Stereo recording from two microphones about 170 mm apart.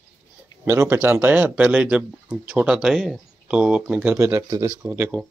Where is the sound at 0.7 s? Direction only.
15° right (ahead or behind).